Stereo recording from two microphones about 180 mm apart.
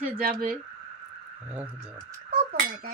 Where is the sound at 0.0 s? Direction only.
55° right (ahead or behind).